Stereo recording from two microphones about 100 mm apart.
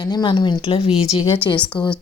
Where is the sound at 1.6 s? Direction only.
50° left (ahead or behind).